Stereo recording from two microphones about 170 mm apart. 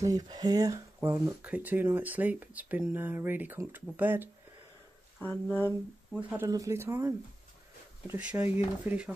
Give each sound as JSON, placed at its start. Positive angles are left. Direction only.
{"t": 0.0, "sound": "speech", "side_deg": -20}
{"t": 5.2, "sound": "speech", "side_deg": 10}
{"t": 6.3, "sound": "speech", "side_deg": -20}